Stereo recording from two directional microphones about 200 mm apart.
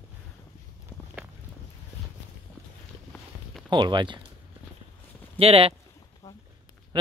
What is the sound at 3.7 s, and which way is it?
Speech, 25° right (ahead or behind).